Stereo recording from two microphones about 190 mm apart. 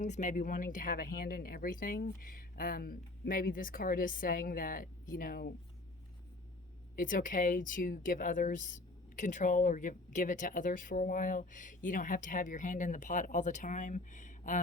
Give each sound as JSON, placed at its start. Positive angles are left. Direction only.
{"t": 0.0, "sound": "speech", "side_deg": 40}
{"t": 6.9, "sound": "speech", "side_deg": 45}